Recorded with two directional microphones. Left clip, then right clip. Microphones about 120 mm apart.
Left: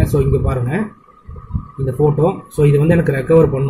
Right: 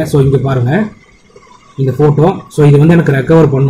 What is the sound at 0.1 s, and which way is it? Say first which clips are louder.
Speech: right 6 dB; 25° right (ahead or behind).